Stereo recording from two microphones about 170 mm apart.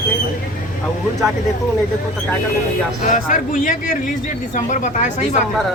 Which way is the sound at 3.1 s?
50° left (ahead or behind).